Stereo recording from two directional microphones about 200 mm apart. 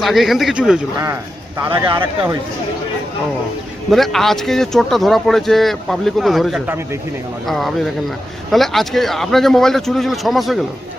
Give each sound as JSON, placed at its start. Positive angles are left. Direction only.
{"t": 0.0, "sound": "speech", "side_deg": 0}
{"t": 1.9, "sound": "speech", "side_deg": -25}
{"t": 3.9, "sound": "speech", "side_deg": 0}